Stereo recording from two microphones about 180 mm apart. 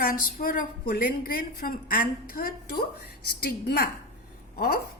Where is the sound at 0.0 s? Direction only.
50° left (ahead or behind).